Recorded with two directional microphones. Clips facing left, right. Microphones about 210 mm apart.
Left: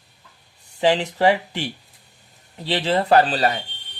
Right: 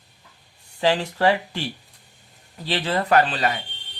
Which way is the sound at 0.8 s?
25° left (ahead or behind).